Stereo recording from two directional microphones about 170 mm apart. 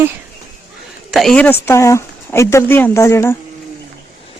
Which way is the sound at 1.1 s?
Centre (ahead or behind).